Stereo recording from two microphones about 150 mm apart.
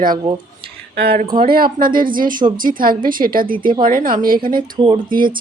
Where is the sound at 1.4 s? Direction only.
75° right (ahead or behind).